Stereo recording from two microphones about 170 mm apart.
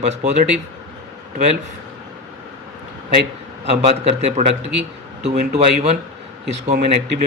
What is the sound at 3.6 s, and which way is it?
A man's voice, 40° right (ahead or behind).